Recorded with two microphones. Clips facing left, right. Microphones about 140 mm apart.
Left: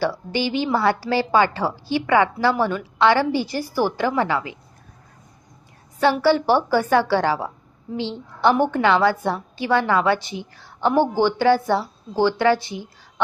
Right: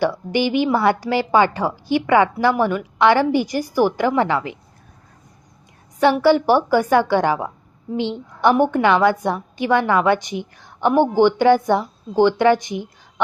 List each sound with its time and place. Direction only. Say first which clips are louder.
0.0 s a woman's voice: right 4 dB; 15° right (ahead or behind)
6.0 s a woman's voice: right 3 dB; 15° right (ahead or behind)